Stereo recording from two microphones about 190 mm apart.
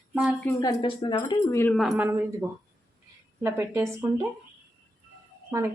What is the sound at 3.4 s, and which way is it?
Speech, 15° right (ahead or behind).